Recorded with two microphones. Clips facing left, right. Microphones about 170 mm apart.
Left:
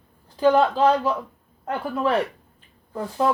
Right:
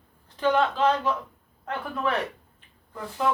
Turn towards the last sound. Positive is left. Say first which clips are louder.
# left 4 dB
turn(degrees=40)  # may be behind; listen again after turning